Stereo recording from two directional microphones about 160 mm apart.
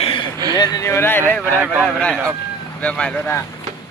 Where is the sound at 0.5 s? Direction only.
25° left (ahead or behind); by 3.4 s 5° left (ahead or behind).